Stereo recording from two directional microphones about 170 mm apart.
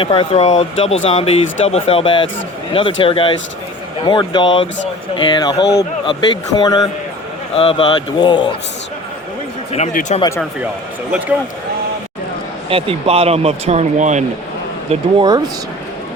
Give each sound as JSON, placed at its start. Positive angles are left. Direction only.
{"t": 0.0, "sound": "speech", "side_deg": 35}
{"t": 9.7, "sound": "speech", "side_deg": 45}
{"t": 12.7, "sound": "speech", "side_deg": -35}
{"t": 14.8, "sound": "speech", "side_deg": -25}